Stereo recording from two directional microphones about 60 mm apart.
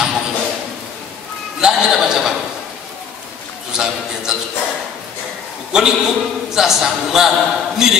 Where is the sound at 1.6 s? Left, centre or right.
Centre.